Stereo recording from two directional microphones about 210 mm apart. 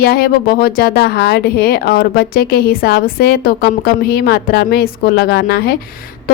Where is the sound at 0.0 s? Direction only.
45° left (ahead or behind).